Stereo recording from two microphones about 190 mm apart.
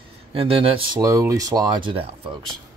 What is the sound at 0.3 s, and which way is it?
Speech, 30° right (ahead or behind).